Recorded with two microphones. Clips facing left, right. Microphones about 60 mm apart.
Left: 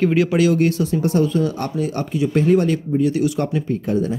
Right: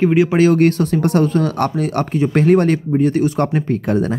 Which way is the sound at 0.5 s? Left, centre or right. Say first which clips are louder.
Right 4 dB; right.